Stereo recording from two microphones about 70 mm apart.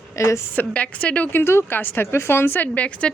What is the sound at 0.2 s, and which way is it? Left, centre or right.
Speech, left.